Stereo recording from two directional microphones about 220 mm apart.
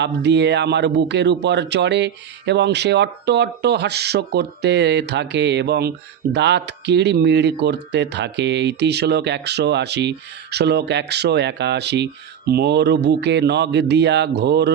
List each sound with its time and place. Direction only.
0.0 s speech: 50° right (ahead or behind)